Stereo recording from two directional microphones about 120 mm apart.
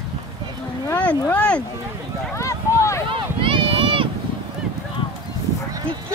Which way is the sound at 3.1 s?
45° right (ahead or behind).